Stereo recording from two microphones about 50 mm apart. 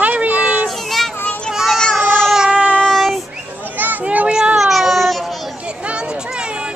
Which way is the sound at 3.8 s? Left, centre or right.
Right.